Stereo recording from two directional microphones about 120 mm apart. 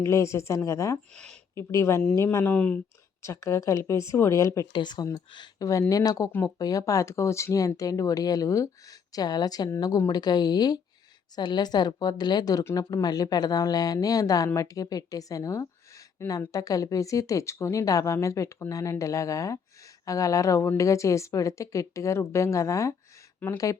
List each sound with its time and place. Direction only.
0.0 s speech: 25° left (ahead or behind)
1.1 s speech: 5° left (ahead or behind)
1.5 s speech: 25° left (ahead or behind)
3.2 s speech: 25° left (ahead or behind)
4.7 s speech: 40° left (ahead or behind); by 23.6 s 15° left (ahead or behind)